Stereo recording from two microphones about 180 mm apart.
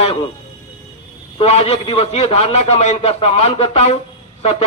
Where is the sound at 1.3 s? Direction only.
35° left (ahead or behind).